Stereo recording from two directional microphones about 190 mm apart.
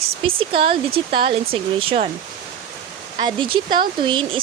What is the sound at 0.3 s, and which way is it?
Speech, 30° right (ahead or behind).